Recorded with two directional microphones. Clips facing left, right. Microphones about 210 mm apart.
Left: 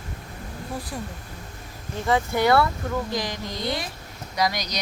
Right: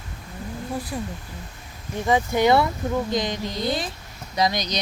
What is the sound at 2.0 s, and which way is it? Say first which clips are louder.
Speech: right 2 dB; 15° right (ahead or behind).